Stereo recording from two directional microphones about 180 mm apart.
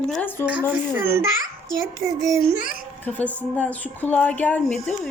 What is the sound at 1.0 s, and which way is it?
A child's voice, 15° right (ahead or behind).